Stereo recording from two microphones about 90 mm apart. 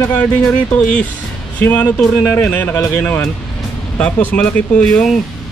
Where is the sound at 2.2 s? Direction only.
20° left (ahead or behind).